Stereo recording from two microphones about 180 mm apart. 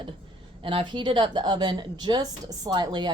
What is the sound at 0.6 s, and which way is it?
A woman's voice, 30° right (ahead or behind).